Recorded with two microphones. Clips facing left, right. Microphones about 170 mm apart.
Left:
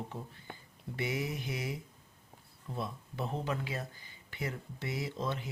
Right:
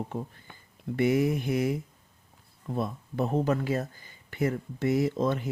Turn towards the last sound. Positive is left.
turn(degrees=-50)  # may be behind; listen again after turning